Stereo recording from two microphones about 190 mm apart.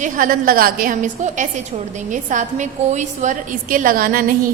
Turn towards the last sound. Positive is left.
turn(degrees=-50)  # may be behind; listen again after turning